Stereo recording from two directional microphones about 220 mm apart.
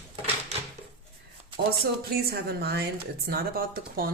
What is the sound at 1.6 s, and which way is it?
Speech, 50° right (ahead or behind).